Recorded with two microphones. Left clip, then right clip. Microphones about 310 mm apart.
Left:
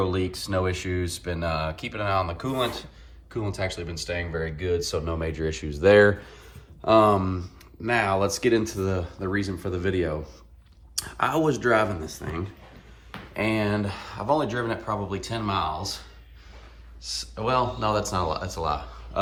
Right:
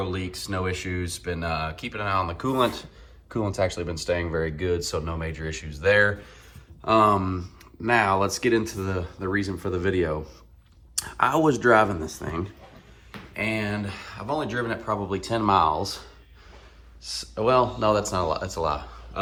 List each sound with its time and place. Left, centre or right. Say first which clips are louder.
0.0 s speech: left 4 dB; centre
3.2 s speech: right 4 dB; centre
13.1 s speech: left 1 dB; centre